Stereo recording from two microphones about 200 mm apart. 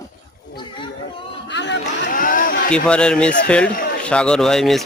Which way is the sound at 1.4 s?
60° left (ahead or behind).